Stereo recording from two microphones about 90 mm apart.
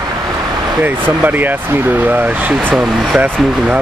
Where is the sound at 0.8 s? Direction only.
20° right (ahead or behind).